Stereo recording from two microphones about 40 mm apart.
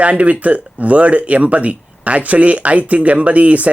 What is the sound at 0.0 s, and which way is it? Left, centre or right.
Speech, right.